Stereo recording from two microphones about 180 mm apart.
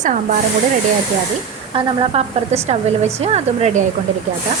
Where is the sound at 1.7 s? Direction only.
30° right (ahead or behind).